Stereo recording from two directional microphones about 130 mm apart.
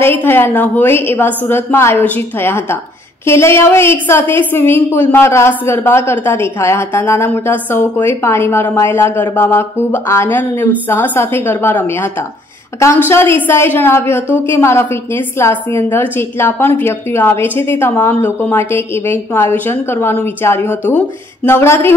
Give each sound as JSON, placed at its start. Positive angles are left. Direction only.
{"t": 0.0, "sound": "a woman's voice", "side_deg": 15}
{"t": 13.1, "sound": "a woman's voice", "side_deg": 20}